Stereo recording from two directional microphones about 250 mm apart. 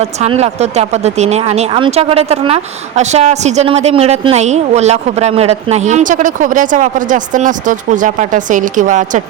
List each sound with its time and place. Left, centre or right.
0.0 s speech: right